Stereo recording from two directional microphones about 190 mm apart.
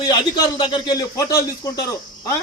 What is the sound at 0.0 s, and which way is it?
A man's voice, 20° left (ahead or behind).